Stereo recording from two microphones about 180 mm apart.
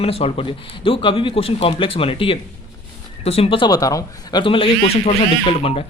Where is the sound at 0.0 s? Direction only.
35° left (ahead or behind).